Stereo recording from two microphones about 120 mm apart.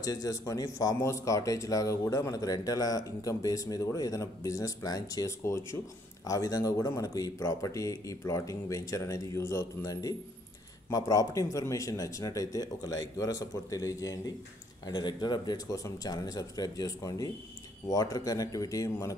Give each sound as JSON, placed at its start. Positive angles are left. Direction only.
{"t": 0.0, "sound": "speech", "side_deg": 30}